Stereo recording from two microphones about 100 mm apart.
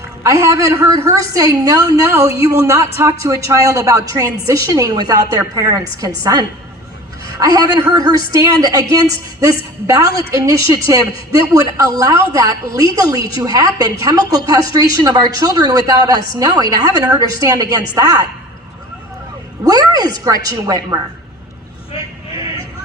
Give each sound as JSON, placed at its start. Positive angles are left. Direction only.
{"t": 0.2, "sound": "a woman's voice", "side_deg": -30}
{"t": 19.6, "sound": "a sound", "side_deg": -40}
{"t": 20.2, "sound": "a woman's voice", "side_deg": -40}